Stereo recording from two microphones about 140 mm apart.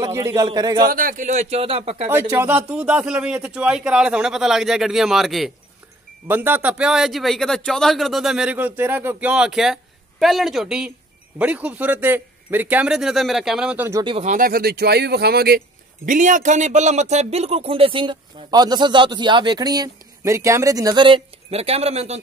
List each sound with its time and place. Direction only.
0.0 s a man's voice: 20° right (ahead or behind)
0.8 s speech: 85° right; by 2.0 s 45° right (ahead or behind)
2.0 s a man's voice: 15° right (ahead or behind)
6.2 s a man's voice: 15° right (ahead or behind)
14.2 s speech: 80° right
16.1 s speech: 65° right (ahead or behind)